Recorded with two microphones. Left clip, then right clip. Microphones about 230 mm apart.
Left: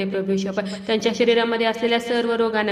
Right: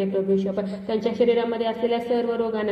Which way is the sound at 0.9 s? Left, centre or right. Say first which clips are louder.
Left 2 dB; left.